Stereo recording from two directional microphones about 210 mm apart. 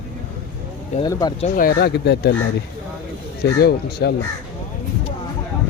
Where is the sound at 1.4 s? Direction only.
40° left (ahead or behind).